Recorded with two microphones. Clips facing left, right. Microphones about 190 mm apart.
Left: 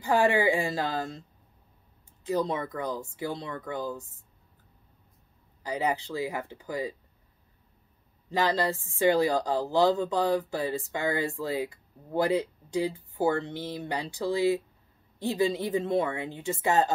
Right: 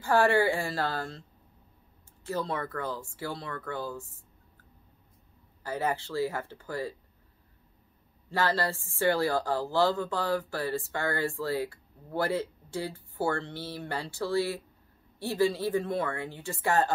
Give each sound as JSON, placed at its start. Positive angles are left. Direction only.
{"t": 0.0, "sound": "speech", "side_deg": 15}
{"t": 2.2, "sound": "speech", "side_deg": 20}
{"t": 5.6, "sound": "speech", "side_deg": 15}
{"t": 8.3, "sound": "speech", "side_deg": 15}